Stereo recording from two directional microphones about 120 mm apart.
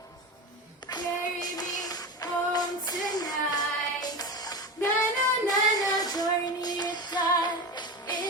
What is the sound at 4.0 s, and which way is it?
Music, 30° left (ahead or behind).